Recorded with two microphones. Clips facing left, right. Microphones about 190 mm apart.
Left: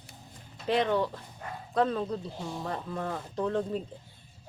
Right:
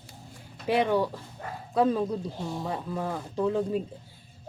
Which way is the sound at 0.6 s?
10° right (ahead or behind).